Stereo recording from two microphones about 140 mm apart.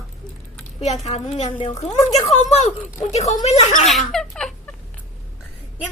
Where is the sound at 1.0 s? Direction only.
55° left (ahead or behind).